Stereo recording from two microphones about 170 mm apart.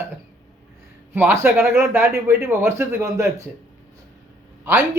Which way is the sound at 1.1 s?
15° right (ahead or behind).